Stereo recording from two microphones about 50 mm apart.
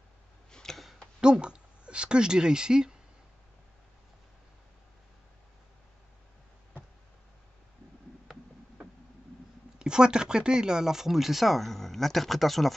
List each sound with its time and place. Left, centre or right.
0.5 s a sound: centre
1.2 s speech: centre
9.8 s speech: centre